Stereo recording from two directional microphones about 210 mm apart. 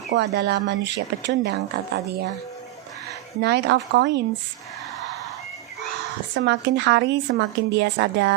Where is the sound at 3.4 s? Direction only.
55° right (ahead or behind).